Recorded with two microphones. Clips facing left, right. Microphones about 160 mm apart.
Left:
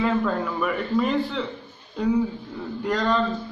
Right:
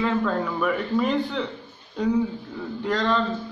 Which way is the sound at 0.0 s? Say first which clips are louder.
Left 1 dB; 5° left (ahead or behind).